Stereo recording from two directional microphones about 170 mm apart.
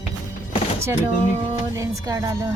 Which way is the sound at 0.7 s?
15° right (ahead or behind).